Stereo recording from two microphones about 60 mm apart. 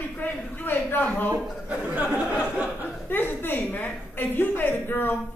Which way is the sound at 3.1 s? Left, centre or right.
Left.